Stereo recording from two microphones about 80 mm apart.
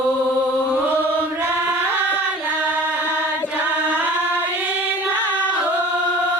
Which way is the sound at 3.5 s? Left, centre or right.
Centre.